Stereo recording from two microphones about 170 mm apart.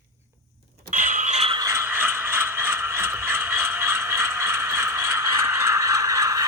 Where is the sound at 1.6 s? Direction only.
15° right (ahead or behind).